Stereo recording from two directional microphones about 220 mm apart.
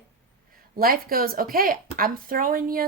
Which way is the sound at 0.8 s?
40° right (ahead or behind).